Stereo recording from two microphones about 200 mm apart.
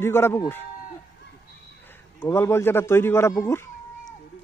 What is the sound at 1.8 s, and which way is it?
A man's voice, 10° left (ahead or behind).